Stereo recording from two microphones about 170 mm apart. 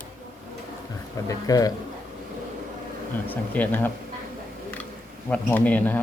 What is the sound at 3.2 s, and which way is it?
Speech, 10° left (ahead or behind).